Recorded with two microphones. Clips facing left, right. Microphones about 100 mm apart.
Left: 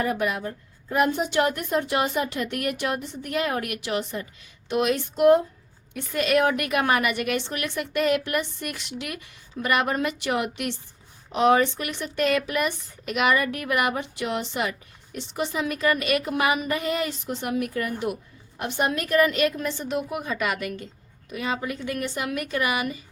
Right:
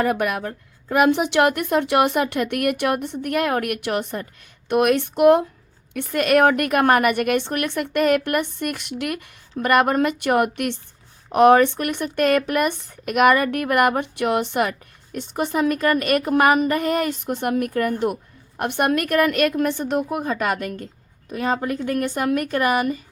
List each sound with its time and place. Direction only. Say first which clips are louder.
0.0 s a woman's voice: right 4 dB; 60° right (ahead or behind); by 23.0 s 45° right (ahead or behind)